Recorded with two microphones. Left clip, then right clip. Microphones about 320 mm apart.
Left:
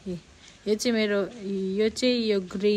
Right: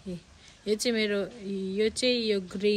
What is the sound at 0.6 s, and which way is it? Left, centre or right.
Speech, centre.